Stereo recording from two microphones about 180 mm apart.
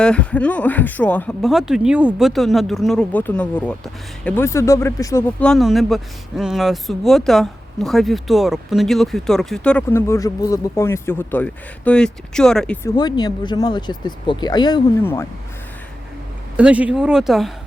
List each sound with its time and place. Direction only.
0.0 s speech: 5° left (ahead or behind)
5.4 s speech: centre (ahead or behind)
12.8 s speech: 20° left (ahead or behind)
16.6 s speech: 5° right (ahead or behind)